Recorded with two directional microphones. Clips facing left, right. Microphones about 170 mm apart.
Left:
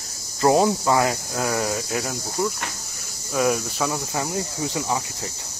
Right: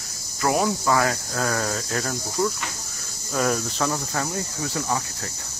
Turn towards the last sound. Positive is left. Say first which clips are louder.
# left 1 dB
turn(degrees=15)  # may be behind; listen again after turning